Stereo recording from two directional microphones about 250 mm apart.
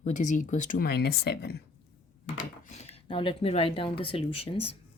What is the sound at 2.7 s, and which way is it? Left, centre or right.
Speech, left.